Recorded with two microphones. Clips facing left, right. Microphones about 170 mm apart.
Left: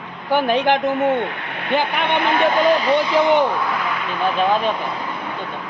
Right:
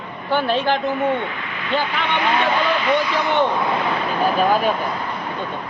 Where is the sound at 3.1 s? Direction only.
15° left (ahead or behind).